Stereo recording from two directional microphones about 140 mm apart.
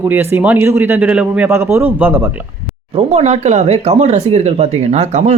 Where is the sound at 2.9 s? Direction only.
50° right (ahead or behind).